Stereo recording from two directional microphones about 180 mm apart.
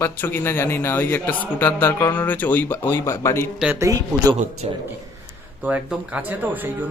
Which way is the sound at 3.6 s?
15° right (ahead or behind).